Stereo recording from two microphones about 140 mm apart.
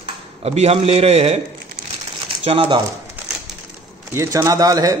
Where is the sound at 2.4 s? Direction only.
40° right (ahead or behind).